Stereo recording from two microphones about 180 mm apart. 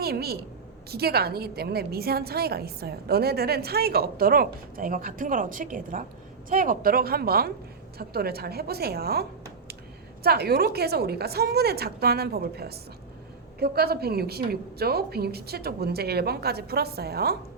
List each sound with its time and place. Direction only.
0.0 s a woman's voice: 60° right (ahead or behind)
10.2 s a woman's voice: 60° right (ahead or behind)